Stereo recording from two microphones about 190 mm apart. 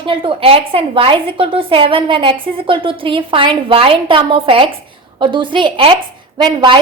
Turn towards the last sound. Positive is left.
turn(degrees=-25)  # may be behind; listen again after turning